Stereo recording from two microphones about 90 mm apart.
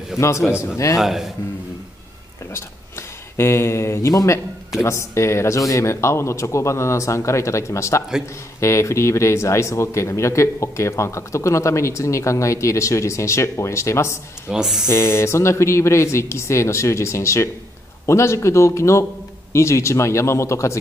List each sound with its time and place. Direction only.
0.1 s speech: 5° right (ahead or behind)
2.5 s speech: 30° left (ahead or behind)
14.5 s speech: 5° right (ahead or behind)
14.9 s speech: 30° left (ahead or behind)